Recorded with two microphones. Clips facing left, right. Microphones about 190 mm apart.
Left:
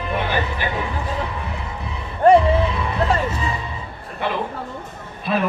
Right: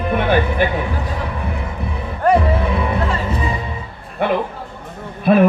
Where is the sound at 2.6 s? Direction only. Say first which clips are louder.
Right 2 dB; 55° right (ahead or behind).